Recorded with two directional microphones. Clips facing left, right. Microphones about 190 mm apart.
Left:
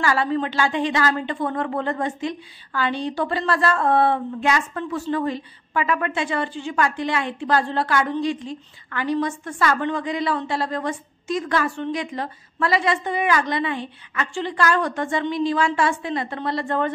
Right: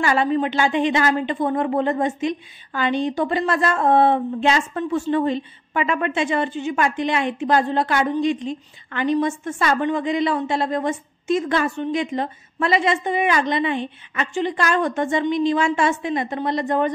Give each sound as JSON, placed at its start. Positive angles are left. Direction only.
{"t": 0.0, "sound": "a woman's voice", "side_deg": -20}